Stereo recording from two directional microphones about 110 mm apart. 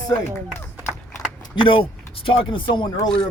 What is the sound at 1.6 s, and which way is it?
Speech, 50° left (ahead or behind).